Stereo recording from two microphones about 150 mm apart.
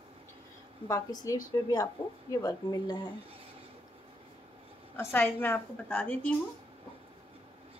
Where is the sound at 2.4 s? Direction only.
25° left (ahead or behind).